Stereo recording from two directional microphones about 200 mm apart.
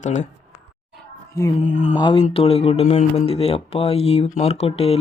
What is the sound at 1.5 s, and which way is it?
Speech, 35° left (ahead or behind).